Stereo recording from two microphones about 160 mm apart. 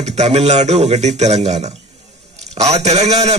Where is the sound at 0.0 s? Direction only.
45° right (ahead or behind).